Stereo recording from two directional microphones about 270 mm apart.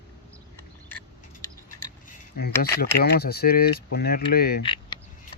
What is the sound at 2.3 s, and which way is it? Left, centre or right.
Speech, left.